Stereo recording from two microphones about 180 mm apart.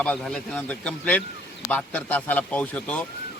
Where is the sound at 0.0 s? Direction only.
5° left (ahead or behind).